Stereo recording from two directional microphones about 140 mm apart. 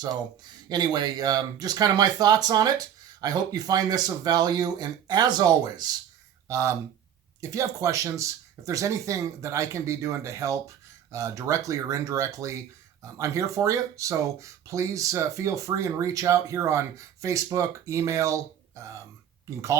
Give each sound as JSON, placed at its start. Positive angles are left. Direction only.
{"t": 0.0, "sound": "speech", "side_deg": -30}